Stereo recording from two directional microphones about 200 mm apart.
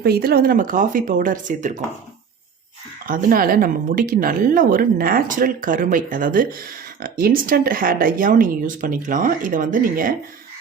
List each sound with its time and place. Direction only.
0.0 s speech: 50° right (ahead or behind)
3.1 s speech: 45° right (ahead or behind)